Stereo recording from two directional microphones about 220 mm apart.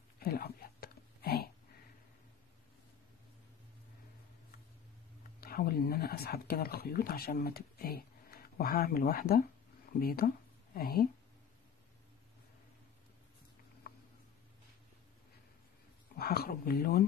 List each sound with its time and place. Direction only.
0.2 s whispering: 45° left (ahead or behind)
5.4 s speech: 45° left (ahead or behind)
13.9 s a sound: 45° left (ahead or behind)
16.2 s speech: 45° left (ahead or behind)